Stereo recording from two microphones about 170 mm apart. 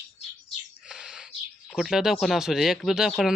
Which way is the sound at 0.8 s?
5° right (ahead or behind).